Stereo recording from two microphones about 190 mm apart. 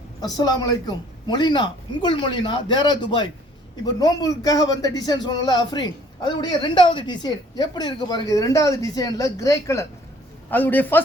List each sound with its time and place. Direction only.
0.2 s a man's voice: 20° left (ahead or behind)